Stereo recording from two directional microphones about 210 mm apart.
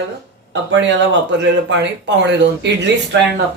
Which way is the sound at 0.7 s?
60° right (ahead or behind).